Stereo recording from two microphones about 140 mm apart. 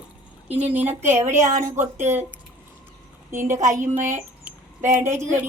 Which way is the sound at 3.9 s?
15° right (ahead or behind).